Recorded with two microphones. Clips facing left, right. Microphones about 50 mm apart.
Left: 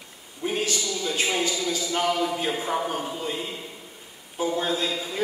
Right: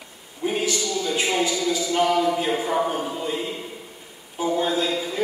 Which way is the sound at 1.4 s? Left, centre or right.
Right.